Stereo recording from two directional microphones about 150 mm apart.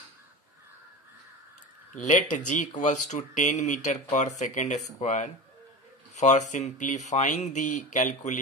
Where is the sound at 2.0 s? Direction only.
55° left (ahead or behind).